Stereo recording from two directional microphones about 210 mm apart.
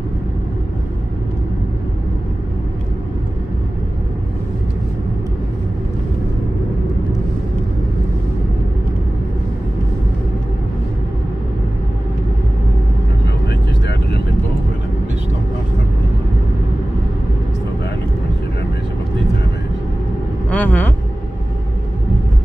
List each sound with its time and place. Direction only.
20.4 s vehicle: 5° left (ahead or behind)